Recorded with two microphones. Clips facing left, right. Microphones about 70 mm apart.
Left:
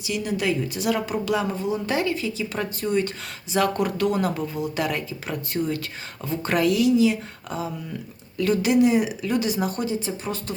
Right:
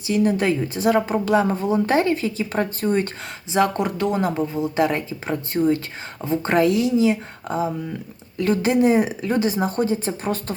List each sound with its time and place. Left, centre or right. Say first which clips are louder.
0.1 s a woman's voice: right 6 dB; right
3.5 s a woman's voice: right 2 dB; right